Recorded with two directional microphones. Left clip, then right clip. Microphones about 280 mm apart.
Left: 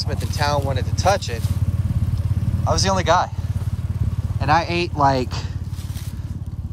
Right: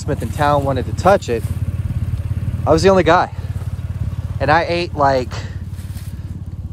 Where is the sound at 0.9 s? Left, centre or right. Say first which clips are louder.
Right 6 dB; centre.